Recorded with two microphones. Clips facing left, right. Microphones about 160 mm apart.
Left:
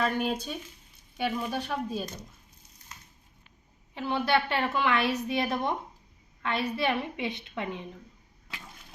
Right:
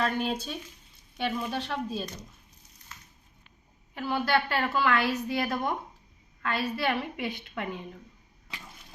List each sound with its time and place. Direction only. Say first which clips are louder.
0.0 s speech: even; 5° left (ahead or behind)
3.9 s a woman's voice: even; 20° left (ahead or behind)